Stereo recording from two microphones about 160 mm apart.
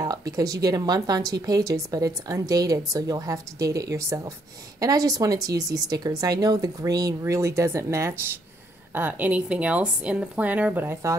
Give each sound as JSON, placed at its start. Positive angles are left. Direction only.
{"t": 0.0, "sound": "speech", "side_deg": -20}